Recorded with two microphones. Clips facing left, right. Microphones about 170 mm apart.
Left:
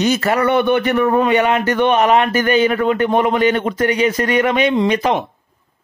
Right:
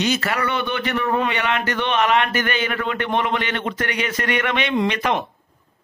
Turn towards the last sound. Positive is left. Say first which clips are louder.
# left 5 dB
turn(degrees=35)  # may be behind; listen again after turning